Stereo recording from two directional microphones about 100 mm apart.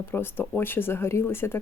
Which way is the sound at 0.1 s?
20° left (ahead or behind).